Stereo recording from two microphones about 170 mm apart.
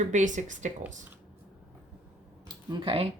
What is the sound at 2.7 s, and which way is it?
Speech, 30° right (ahead or behind).